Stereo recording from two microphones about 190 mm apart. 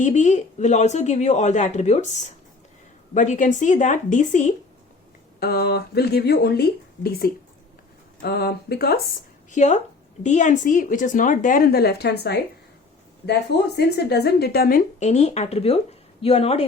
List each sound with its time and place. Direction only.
0.0 s a woman's voice: 40° left (ahead or behind)
3.2 s a woman's voice: 40° left (ahead or behind)
5.4 s speech: 55° left (ahead or behind)
9.5 s a woman's voice: 40° left (ahead or behind); by 12.4 s 60° left (ahead or behind)
13.7 s a woman's voice: 60° left (ahead or behind); by 16.6 s 30° left (ahead or behind)